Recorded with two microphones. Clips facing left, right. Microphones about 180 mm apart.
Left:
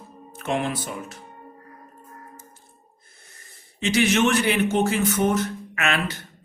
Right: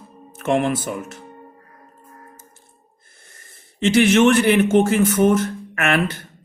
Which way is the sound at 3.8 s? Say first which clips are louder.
Right 6 dB; 55° right (ahead or behind).